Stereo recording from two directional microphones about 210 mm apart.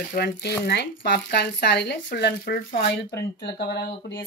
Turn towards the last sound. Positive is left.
turn(degrees=50)  # may be behind; listen again after turning